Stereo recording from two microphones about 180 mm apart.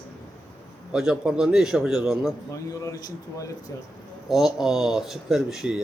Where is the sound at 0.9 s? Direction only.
5° right (ahead or behind).